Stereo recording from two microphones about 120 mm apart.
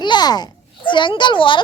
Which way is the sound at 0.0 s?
40° left (ahead or behind).